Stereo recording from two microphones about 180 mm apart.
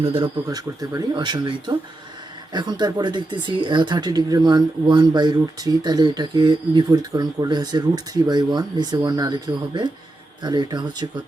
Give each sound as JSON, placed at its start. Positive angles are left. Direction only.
{"t": 0.0, "sound": "speech", "side_deg": -30}